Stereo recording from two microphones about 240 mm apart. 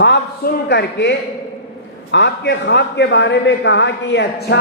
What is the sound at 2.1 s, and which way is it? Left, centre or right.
A man's voice, left.